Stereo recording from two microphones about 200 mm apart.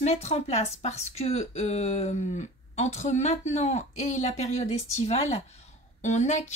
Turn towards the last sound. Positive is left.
turn(degrees=35)  # may be behind; listen again after turning